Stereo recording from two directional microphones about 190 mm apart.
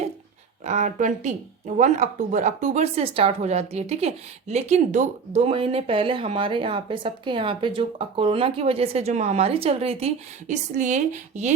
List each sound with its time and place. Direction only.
0.6 s speech: 40° right (ahead or behind)